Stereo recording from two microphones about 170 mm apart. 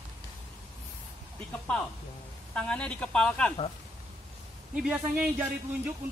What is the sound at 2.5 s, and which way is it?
A man's voice, 5° left (ahead or behind).